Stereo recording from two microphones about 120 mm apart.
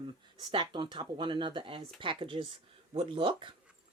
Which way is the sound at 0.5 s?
40° right (ahead or behind).